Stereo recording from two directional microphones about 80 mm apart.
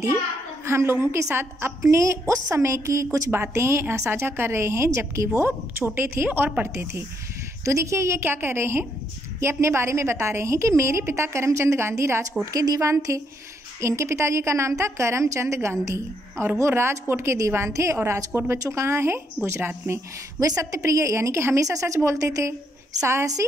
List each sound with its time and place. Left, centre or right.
0.7 s a woman's voice: right
19.9 s a woman's voice: right